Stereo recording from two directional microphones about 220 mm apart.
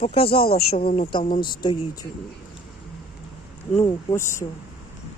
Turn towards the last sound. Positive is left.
turn(degrees=10)  # may be behind; listen again after turning